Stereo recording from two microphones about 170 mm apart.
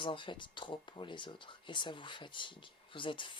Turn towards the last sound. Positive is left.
turn(degrees=30)  # may be behind; listen again after turning